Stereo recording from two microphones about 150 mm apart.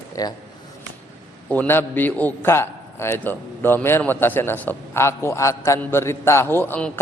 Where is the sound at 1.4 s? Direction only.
10° left (ahead or behind).